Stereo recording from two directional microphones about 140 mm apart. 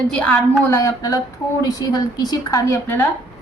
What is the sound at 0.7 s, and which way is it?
A woman's voice, 25° left (ahead or behind).